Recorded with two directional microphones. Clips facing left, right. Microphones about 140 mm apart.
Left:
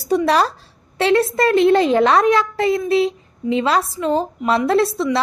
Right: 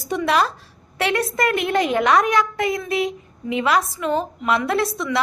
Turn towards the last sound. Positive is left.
turn(degrees=30)  # may be behind; listen again after turning